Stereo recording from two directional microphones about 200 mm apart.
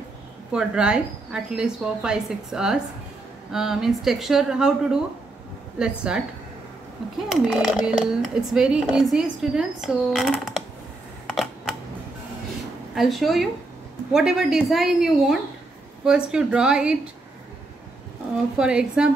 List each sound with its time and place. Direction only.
0.5 s speech: 5° right (ahead or behind)
7.2 s speech: centre (ahead or behind)
11.2 s typing: centre (ahead or behind)
12.9 s speech: centre (ahead or behind)
18.6 s speech: 5° right (ahead or behind)